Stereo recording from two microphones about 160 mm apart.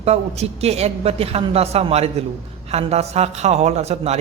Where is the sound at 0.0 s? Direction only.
40° right (ahead or behind).